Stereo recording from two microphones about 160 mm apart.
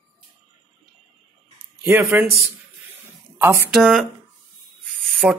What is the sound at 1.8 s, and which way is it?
Speech, 15° right (ahead or behind).